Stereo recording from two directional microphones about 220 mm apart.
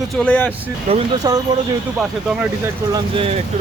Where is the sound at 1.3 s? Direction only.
15° right (ahead or behind).